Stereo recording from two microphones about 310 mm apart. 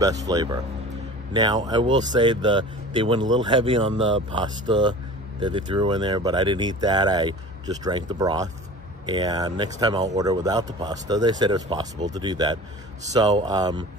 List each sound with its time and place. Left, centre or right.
0.0 s speech: centre